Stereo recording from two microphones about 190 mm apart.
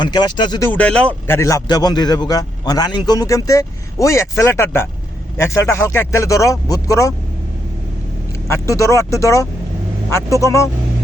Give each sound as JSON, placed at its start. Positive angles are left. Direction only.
{"t": 0.0, "sound": "speech", "side_deg": 25}
{"t": 0.7, "sound": "speech", "side_deg": 5}
{"t": 8.4, "sound": "speech", "side_deg": 15}